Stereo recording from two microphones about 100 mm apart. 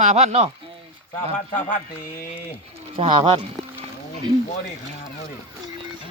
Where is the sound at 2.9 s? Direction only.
65° right (ahead or behind).